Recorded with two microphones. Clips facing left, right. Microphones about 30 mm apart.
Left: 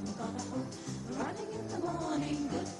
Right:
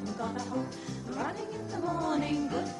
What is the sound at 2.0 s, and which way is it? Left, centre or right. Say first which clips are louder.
Music: right 4 dB; right.